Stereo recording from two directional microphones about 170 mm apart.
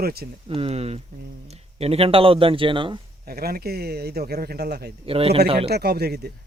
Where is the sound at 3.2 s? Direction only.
65° right (ahead or behind).